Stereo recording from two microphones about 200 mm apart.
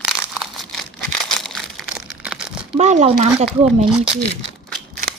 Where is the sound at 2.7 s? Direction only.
35° right (ahead or behind).